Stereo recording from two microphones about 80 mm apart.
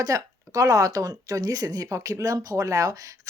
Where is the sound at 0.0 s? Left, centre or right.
Right.